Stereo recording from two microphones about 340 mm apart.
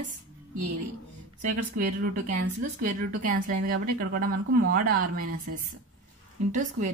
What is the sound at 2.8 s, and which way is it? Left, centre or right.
Speech, right.